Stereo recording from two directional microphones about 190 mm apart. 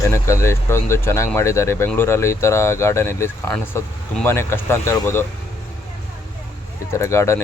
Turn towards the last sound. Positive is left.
turn(degrees=15)  # may be behind; listen again after turning